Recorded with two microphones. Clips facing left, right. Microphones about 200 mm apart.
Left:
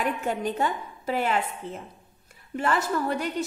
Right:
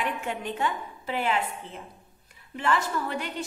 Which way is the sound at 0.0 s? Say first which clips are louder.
Left 4 dB; 40° left (ahead or behind).